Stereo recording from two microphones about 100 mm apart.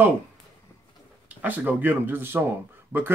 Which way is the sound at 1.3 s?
15° right (ahead or behind).